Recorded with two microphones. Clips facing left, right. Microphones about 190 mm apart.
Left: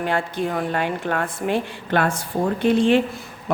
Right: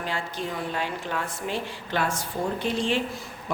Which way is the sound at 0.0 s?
60° left (ahead or behind).